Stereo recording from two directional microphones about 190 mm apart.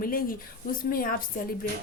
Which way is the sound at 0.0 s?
50° left (ahead or behind).